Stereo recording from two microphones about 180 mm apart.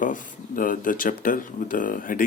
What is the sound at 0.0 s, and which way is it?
Speech, 50° left (ahead or behind).